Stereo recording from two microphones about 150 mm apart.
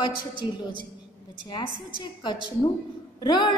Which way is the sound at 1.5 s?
30° left (ahead or behind).